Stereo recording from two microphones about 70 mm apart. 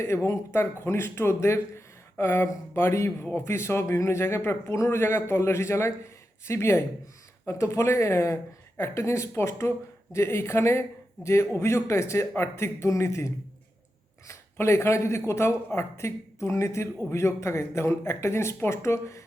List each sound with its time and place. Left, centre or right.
0.3 s a man's voice: left